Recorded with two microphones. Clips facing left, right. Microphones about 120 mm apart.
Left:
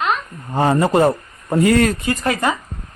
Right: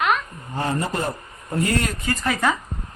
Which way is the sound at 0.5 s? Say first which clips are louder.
Left 9 dB; 75° left (ahead or behind).